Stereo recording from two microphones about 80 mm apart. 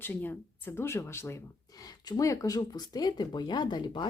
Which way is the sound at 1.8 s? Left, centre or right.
Left.